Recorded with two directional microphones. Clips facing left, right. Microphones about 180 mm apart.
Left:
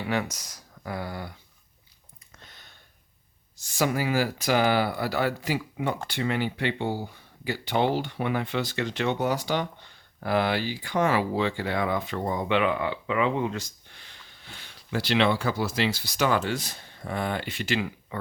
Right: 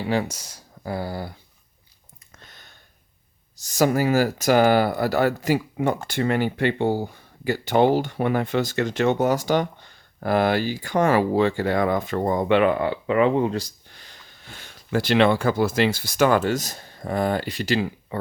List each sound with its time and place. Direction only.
0.0 s speech: 30° right (ahead or behind)
2.4 s a sound: 50° right (ahead or behind)
3.6 s speech: 40° right (ahead or behind)